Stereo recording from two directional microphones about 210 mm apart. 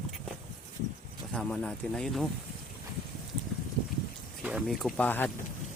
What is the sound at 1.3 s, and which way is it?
Speech, 5° left (ahead or behind).